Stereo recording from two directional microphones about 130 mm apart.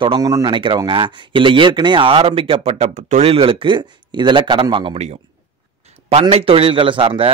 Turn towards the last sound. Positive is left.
turn(degrees=-45)  # may be behind; listen again after turning